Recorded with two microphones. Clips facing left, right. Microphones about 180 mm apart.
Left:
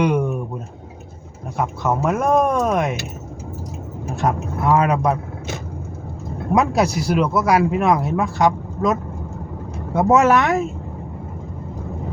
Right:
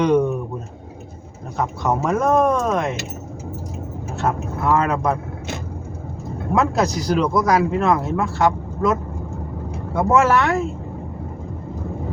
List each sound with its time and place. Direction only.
0.0 s speech: 10° left (ahead or behind)
1.5 s speech: 5° left (ahead or behind)
4.1 s speech: 15° left (ahead or behind)
6.5 s speech: 15° left (ahead or behind)